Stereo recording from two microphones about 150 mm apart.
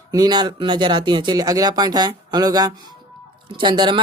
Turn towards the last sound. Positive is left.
turn(degrees=-30)  # may be behind; listen again after turning